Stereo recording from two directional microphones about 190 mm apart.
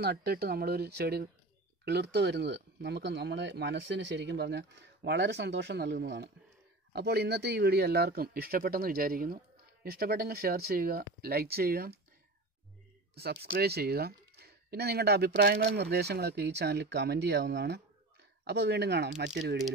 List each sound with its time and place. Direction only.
0.0 s speech: 55° right (ahead or behind)
13.2 s speech: 55° right (ahead or behind)